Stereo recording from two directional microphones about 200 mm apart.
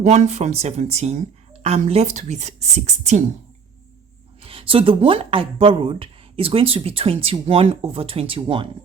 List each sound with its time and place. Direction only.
0.0 s speech: 35° right (ahead or behind)
4.4 s speech: 25° right (ahead or behind)